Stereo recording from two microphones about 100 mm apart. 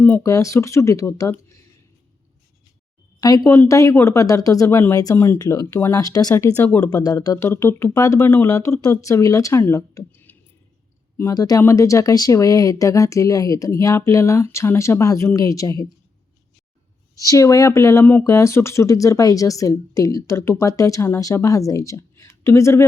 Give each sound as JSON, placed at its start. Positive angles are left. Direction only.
{"t": 0.2, "sound": "speech", "side_deg": 30}
{"t": 3.2, "sound": "speech", "side_deg": 35}
{"t": 6.7, "sound": "speech", "side_deg": 15}
{"t": 6.9, "sound": "speech", "side_deg": 40}
{"t": 10.1, "sound": "a sound", "side_deg": 20}
{"t": 11.2, "sound": "speech", "side_deg": 35}
{"t": 17.2, "sound": "speech", "side_deg": 35}